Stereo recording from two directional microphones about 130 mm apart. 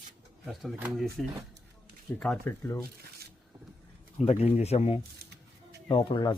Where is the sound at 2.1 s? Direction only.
20° left (ahead or behind).